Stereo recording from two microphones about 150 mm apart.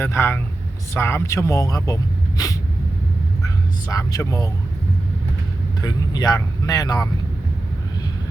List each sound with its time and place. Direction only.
0.0 s speech: 15° left (ahead or behind)
3.4 s speech: 25° left (ahead or behind)
5.8 s speech: 25° left (ahead or behind)